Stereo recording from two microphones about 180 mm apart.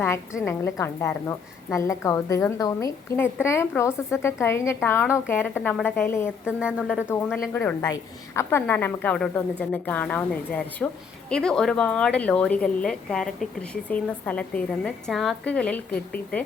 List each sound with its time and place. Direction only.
0.4 s a woman's voice: 15° left (ahead or behind)
6.4 s a woman's voice: 5° right (ahead or behind)
7.1 s a woman's voice: 5° left (ahead or behind)